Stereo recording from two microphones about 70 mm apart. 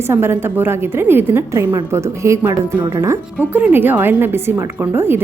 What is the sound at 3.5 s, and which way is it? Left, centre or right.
A woman's voice, right.